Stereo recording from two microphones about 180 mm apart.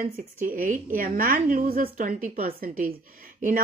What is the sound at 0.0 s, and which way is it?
A woman's voice, 50° right (ahead or behind).